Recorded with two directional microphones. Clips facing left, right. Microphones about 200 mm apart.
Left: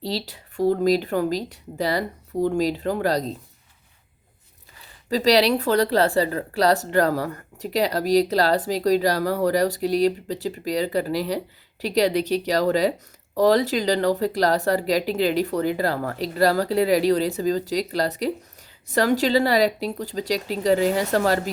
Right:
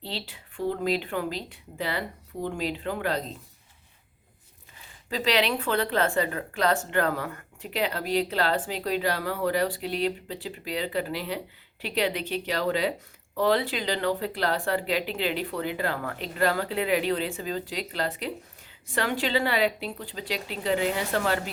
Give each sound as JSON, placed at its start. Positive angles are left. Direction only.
{"t": 0.0, "sound": "a woman's voice", "side_deg": 40}
{"t": 5.0, "sound": "a woman's voice", "side_deg": 40}